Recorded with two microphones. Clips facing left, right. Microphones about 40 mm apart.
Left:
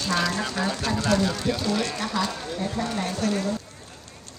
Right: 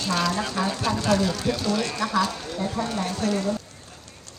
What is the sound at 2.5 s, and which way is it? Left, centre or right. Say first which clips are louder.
Speech: right 1 dB; centre.